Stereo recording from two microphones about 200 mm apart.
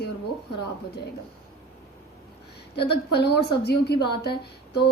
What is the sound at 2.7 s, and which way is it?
Speech, 55° left (ahead or behind).